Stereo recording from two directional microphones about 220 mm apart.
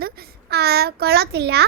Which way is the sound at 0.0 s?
45° right (ahead or behind).